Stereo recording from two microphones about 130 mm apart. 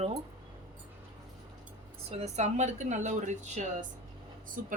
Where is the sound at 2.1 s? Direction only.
60° right (ahead or behind).